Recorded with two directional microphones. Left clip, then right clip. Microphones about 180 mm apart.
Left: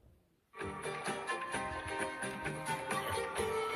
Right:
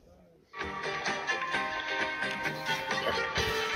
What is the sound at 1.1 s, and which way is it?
Music, 45° left (ahead or behind).